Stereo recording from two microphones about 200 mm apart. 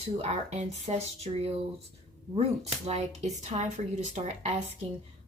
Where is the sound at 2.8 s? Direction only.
30° right (ahead or behind).